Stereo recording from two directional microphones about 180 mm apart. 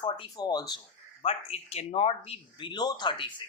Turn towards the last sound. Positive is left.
turn(degrees=25)  # may be behind; listen again after turning